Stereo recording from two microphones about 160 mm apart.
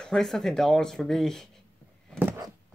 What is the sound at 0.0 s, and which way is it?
Speech, 5° left (ahead or behind).